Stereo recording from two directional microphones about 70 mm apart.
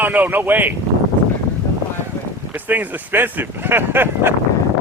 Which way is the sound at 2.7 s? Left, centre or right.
Right.